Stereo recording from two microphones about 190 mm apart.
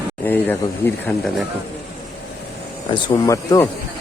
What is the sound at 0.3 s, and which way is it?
Speech, 10° left (ahead or behind).